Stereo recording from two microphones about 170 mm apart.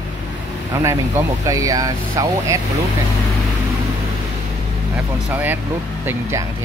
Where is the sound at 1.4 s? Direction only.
20° right (ahead or behind).